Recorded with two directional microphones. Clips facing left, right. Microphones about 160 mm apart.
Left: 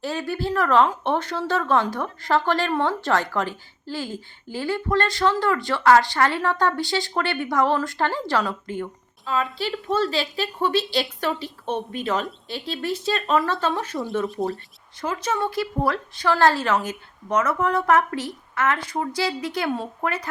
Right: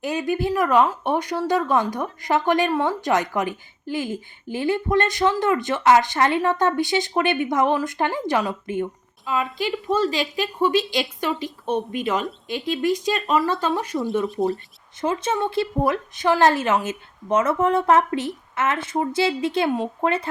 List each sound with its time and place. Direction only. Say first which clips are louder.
0.0 s speech: right 3 dB; 15° right (ahead or behind)
13.1 s speech: right 1 dB; 5° right (ahead or behind)
15.0 s speech: right 2 dB; 25° right (ahead or behind)